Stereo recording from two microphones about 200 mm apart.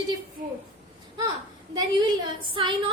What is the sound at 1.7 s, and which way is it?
Speech, 20° right (ahead or behind).